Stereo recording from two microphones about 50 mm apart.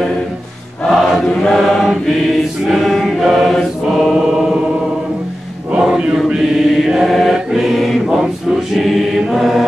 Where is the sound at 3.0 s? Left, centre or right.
Centre.